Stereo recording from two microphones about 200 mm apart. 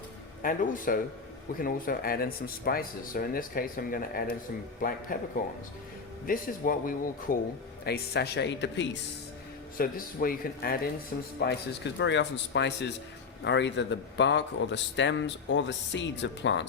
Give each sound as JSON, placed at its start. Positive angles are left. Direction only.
{"t": 0.4, "sound": "speech", "side_deg": 40}
{"t": 9.7, "sound": "speech", "side_deg": 45}